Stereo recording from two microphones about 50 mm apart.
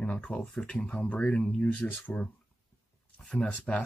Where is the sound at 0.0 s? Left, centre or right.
Left.